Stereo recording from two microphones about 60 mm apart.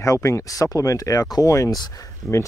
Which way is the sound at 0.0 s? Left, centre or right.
Left.